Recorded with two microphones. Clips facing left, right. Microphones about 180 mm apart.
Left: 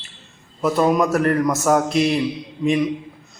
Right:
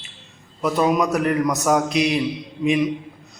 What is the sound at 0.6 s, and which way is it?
A man's voice, centre (ahead or behind).